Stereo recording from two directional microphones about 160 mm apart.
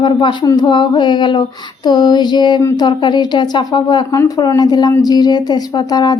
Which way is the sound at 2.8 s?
30° left (ahead or behind).